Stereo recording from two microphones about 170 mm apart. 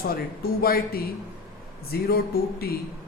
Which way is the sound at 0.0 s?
60° left (ahead or behind).